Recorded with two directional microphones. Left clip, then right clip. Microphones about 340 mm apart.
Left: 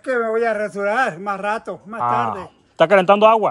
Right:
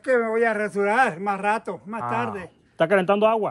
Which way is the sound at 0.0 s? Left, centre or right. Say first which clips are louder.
Left 2 dB; centre.